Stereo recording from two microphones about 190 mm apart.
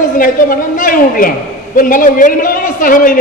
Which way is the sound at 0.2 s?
45° left (ahead or behind).